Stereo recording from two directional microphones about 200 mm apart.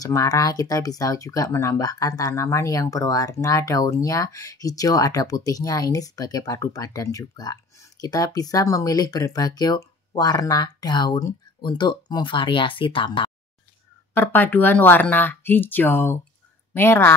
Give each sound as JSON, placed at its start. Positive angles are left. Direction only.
{"t": 0.0, "sound": "speech", "side_deg": 15}
{"t": 14.1, "sound": "speech", "side_deg": 10}